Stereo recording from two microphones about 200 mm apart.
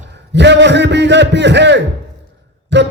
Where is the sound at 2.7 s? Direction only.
60° right (ahead or behind).